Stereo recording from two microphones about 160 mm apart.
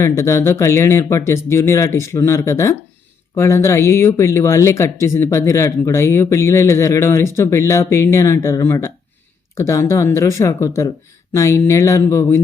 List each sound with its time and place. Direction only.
0.0 s speech: 15° left (ahead or behind)